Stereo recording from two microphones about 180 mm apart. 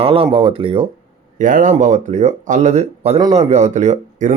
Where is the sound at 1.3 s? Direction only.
45° right (ahead or behind).